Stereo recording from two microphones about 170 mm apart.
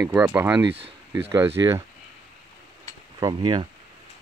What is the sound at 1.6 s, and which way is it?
Speech, 20° right (ahead or behind).